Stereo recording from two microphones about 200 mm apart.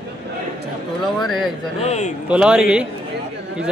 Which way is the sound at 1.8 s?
35° left (ahead or behind).